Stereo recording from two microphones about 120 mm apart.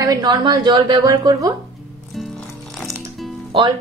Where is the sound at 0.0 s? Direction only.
35° right (ahead or behind).